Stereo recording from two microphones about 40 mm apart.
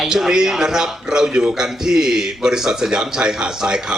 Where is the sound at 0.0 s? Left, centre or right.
Centre.